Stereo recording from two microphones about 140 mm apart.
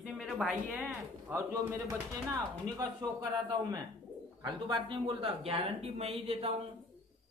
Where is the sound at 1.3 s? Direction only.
20° right (ahead or behind); by 6.5 s 45° right (ahead or behind).